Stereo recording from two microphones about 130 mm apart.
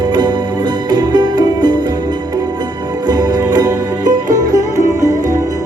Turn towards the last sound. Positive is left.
turn(degrees=-25)  # may be behind; listen again after turning